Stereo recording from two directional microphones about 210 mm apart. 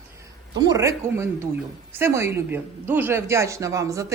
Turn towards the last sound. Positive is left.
turn(degrees=-15)  # may be behind; listen again after turning